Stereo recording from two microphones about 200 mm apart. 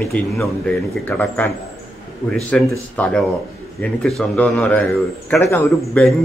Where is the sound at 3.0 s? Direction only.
5° left (ahead or behind).